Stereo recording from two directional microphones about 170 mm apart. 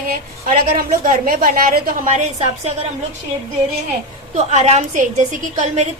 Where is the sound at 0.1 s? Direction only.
55° right (ahead or behind).